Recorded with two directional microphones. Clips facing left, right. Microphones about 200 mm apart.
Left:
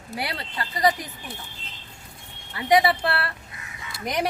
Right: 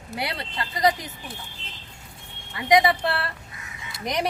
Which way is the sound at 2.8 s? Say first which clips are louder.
Even; 5° left (ahead or behind).